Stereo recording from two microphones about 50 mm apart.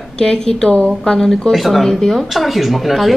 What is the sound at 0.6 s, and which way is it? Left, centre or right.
Speech, left.